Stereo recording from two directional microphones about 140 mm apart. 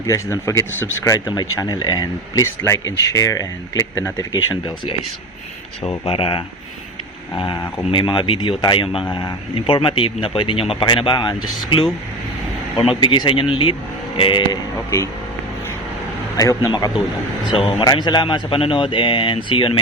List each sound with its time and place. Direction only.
0.0 s speech: 20° left (ahead or behind)
5.8 s speech: 40° left (ahead or behind)
13.0 s speech: 35° left (ahead or behind)
14.8 s speech: 20° left (ahead or behind)
16.4 s speech: 25° left (ahead or behind)
17.5 s speech: 40° left (ahead or behind)
17.8 s speech: 30° left (ahead or behind)